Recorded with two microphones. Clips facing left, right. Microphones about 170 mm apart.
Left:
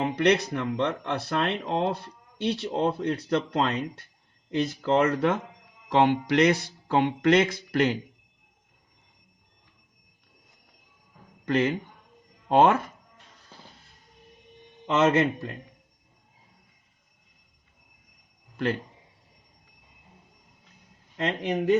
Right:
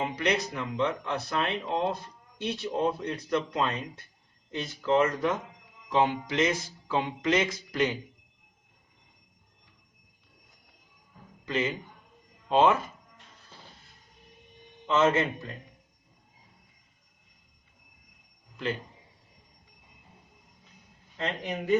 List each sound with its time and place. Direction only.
0.0 s speech: 60° left (ahead or behind)
11.4 s speech: 65° left (ahead or behind)
14.8 s speech: 55° left (ahead or behind)
18.5 s speech: 70° left (ahead or behind)